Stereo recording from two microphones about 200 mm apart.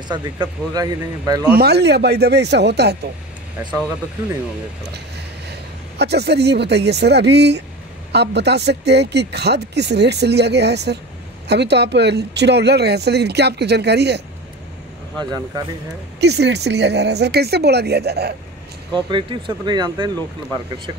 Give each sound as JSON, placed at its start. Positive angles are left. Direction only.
{"t": 0.1, "sound": "speech", "side_deg": -20}
{"t": 1.6, "sound": "speech", "side_deg": -55}
{"t": 5.5, "sound": "speech", "side_deg": -55}
{"t": 15.1, "sound": "speech", "side_deg": -20}
{"t": 16.2, "sound": "speech", "side_deg": -55}
{"t": 18.9, "sound": "speech", "side_deg": -25}